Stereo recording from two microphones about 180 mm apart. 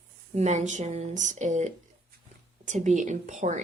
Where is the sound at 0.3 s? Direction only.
40° right (ahead or behind).